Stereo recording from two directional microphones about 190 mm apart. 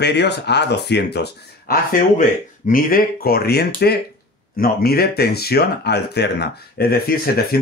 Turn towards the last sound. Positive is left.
turn(degrees=55)  # may be behind; listen again after turning